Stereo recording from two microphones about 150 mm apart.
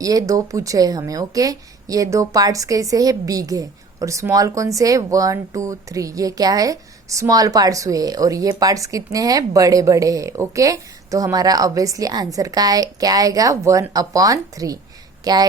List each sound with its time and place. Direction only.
0.0 s a woman's voice: 25° right (ahead or behind)